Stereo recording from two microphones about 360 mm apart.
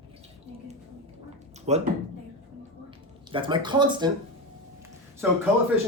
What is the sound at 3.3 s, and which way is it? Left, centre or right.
Speech, centre.